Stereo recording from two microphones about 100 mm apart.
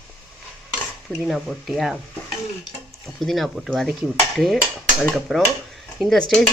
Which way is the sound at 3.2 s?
Centre (ahead or behind).